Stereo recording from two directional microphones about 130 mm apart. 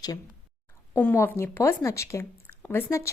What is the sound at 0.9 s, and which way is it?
A woman's voice, 15° left (ahead or behind).